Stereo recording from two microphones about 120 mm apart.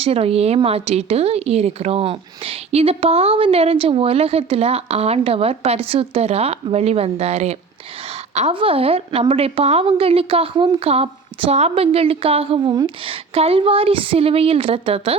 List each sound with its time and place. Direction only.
0.0 s speech: 55° right (ahead or behind)
8.5 s a woman's voice: 50° right (ahead or behind)